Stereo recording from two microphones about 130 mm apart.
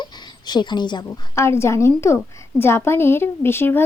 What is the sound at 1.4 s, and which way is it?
A woman's voice, 20° left (ahead or behind).